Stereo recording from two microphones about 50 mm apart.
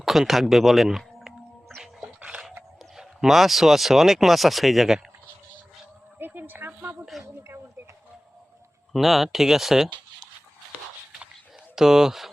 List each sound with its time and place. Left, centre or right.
0.0 s speech: centre
2.9 s speech: centre
6.1 s a sound: right
7.1 s a sound: centre
8.9 s speech: centre
11.8 s speech: centre